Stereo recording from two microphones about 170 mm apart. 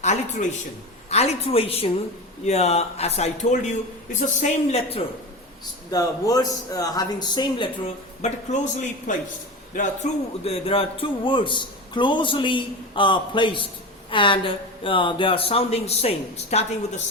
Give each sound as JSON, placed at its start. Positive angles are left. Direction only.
{"t": 0.0, "sound": "a man's voice", "side_deg": 45}
{"t": 5.9, "sound": "a man's voice", "side_deg": 20}
{"t": 8.2, "sound": "a man's voice", "side_deg": 40}